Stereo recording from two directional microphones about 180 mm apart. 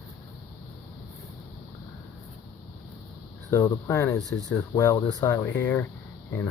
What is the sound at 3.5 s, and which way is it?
Speech, 15° left (ahead or behind).